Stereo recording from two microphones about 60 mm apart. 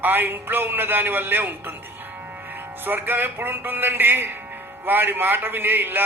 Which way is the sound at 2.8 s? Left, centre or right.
Right.